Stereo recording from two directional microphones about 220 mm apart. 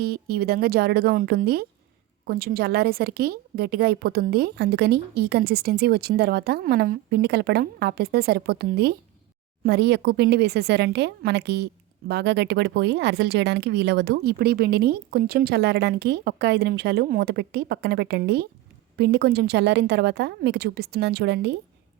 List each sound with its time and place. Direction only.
0.0 s a woman's voice: 45° right (ahead or behind)